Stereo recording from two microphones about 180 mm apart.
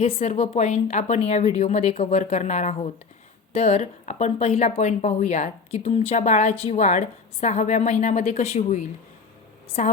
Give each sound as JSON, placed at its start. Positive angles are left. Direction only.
{"t": 0.0, "sound": "a woman's voice", "side_deg": 35}